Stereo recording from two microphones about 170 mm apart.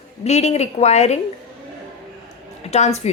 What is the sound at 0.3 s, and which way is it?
Speech, 40° left (ahead or behind).